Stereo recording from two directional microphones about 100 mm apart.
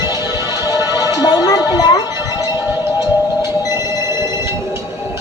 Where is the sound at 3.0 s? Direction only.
40° left (ahead or behind).